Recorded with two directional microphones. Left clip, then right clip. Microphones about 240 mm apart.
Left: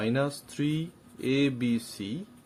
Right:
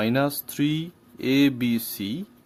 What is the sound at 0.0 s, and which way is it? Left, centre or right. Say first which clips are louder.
Speech: right 5 dB; right.